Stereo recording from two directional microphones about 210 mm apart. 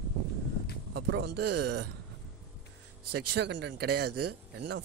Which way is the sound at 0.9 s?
50° right (ahead or behind).